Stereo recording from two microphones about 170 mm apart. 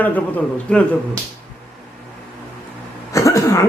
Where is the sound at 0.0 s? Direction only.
10° left (ahead or behind).